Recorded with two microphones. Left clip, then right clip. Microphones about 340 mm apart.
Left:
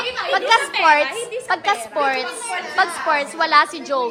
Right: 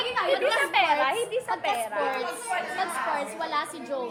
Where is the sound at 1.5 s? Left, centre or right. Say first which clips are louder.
Left 11 dB; left.